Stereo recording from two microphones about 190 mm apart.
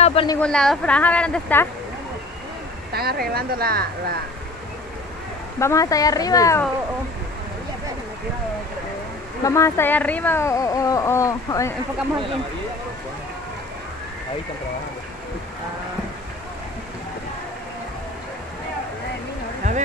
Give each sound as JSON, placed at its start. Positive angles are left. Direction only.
{"t": 0.0, "sound": "a sound", "side_deg": 30}
{"t": 0.4, "sound": "speech", "side_deg": 5}
{"t": 2.9, "sound": "speech", "side_deg": -55}
{"t": 5.6, "sound": "speech", "side_deg": 15}
{"t": 9.4, "sound": "speech", "side_deg": 15}